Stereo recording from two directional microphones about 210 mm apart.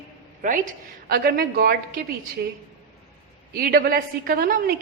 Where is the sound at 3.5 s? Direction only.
45° right (ahead or behind).